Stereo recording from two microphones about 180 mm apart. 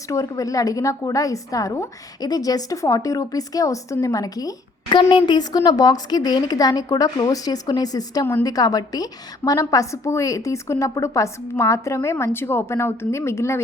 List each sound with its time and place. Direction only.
0.1 s a woman's voice: 20° left (ahead or behind)